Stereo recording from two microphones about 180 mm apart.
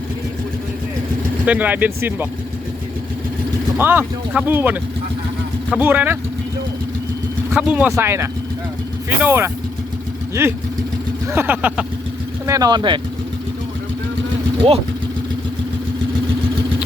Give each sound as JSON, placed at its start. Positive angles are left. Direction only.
{"t": 1.5, "sound": "speech", "side_deg": -10}
{"t": 3.8, "sound": "speech", "side_deg": -10}
{"t": 7.5, "sound": "speech", "side_deg": -5}
{"t": 12.5, "sound": "speech", "side_deg": -20}
{"t": 14.6, "sound": "speech", "side_deg": -30}